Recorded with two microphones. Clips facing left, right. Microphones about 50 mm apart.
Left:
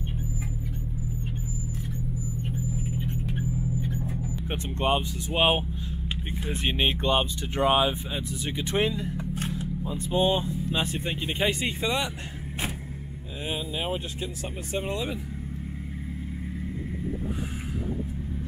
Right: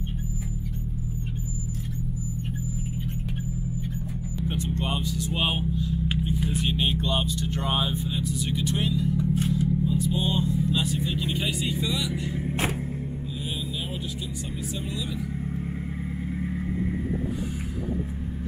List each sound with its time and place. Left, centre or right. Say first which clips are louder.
4.5 s speech: left 3 dB; left
9.1 s vehicle: right 6 dB; left
9.6 s speech: right 7 dB; left